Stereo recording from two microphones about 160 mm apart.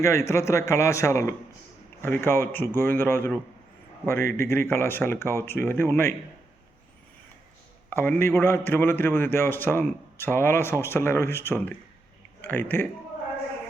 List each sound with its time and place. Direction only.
0.0 s a man's voice: 15° left (ahead or behind)
7.9 s a man's voice: 15° left (ahead or behind)